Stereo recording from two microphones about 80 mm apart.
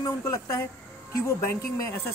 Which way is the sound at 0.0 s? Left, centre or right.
Left.